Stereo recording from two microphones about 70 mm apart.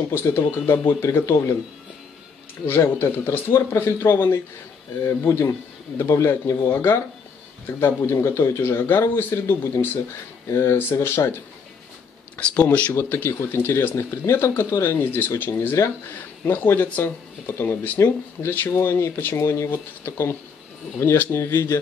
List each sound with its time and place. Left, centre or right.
0.1 s speech: left
2.6 s speech: left
12.4 s speech: centre
12.9 s speech: left